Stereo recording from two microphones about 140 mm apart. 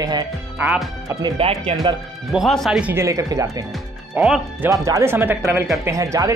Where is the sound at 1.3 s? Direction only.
45° right (ahead or behind).